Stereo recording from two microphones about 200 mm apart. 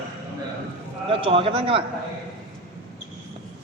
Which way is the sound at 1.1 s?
25° right (ahead or behind).